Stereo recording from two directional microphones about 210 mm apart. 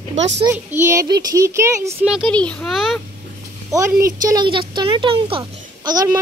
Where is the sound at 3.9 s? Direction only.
15° right (ahead or behind).